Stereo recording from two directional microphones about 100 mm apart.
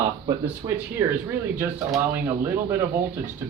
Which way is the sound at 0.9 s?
20° right (ahead or behind).